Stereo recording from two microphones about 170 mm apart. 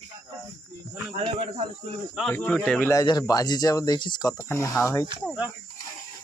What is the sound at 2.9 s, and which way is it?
Speech, 20° left (ahead or behind).